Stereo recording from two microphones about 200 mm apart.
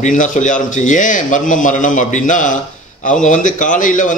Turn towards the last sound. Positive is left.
turn(degrees=40)  # may be behind; listen again after turning